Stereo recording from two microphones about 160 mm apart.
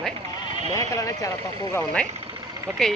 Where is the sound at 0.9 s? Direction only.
20° left (ahead or behind).